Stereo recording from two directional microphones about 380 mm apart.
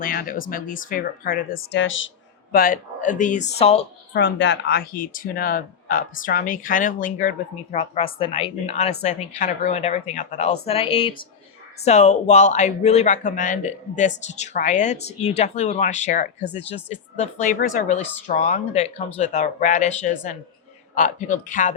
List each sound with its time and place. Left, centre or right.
0.0 s speech: left
4.2 s speech: left